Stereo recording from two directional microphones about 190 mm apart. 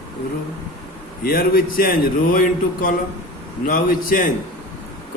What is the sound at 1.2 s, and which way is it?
A man's voice, 50° left (ahead or behind).